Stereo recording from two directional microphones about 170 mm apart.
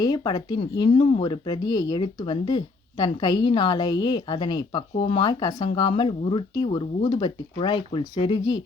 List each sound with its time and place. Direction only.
0.0 s speech: 20° left (ahead or behind)